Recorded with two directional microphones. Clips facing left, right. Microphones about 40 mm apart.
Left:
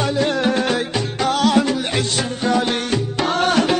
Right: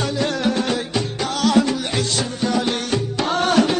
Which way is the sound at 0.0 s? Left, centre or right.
Left.